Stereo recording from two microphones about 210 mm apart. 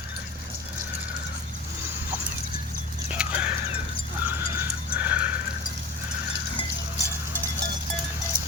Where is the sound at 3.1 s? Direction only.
5° right (ahead or behind).